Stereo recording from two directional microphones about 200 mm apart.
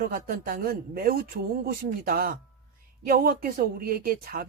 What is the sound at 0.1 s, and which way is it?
Speech, 45° right (ahead or behind).